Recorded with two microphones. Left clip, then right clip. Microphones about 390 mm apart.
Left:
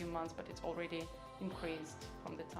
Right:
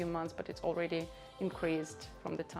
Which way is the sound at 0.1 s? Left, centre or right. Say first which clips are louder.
Right 4 dB; right.